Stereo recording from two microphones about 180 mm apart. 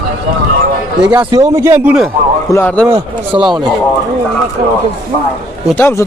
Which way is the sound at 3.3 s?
25° right (ahead or behind).